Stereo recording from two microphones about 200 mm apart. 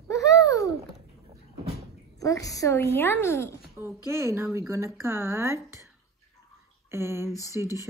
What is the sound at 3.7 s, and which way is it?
Speech, 10° right (ahead or behind).